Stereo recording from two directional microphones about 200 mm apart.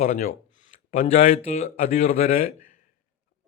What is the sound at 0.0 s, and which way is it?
A man's voice, 35° left (ahead or behind).